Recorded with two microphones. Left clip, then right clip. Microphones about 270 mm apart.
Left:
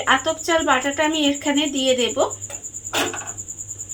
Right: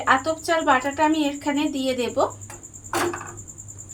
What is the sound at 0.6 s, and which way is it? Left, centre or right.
A woman's voice, left.